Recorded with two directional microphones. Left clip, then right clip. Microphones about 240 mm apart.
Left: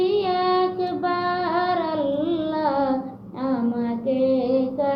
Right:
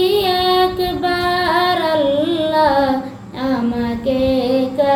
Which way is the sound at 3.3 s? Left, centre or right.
Centre.